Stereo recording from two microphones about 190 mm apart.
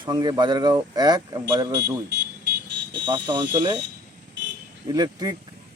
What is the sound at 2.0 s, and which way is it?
Vehicle, 65° right (ahead or behind).